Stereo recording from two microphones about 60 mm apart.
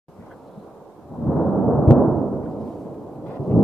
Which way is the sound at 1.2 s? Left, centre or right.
Centre.